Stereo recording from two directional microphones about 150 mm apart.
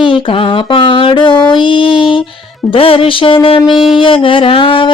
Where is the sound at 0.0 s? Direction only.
35° left (ahead or behind).